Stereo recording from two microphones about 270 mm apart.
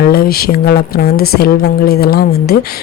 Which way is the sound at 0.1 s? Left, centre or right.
Left.